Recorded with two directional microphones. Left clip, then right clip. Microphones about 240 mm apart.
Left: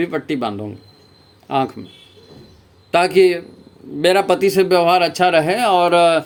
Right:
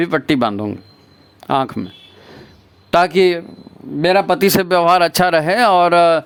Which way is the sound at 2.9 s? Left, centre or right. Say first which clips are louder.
Even; right.